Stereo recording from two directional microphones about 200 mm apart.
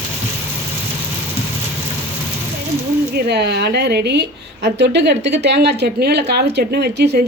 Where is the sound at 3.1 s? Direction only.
55° right (ahead or behind).